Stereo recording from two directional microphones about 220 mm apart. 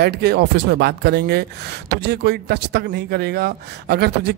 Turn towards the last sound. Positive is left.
turn(degrees=-50)  # may be behind; listen again after turning